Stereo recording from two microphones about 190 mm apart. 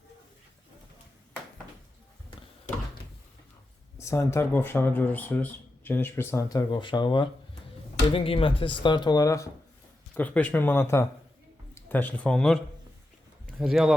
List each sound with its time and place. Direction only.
4.0 s speech: 15° left (ahead or behind)
13.6 s speech: centre (ahead or behind)